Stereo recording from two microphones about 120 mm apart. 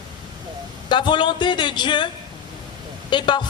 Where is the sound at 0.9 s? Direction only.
40° left (ahead or behind).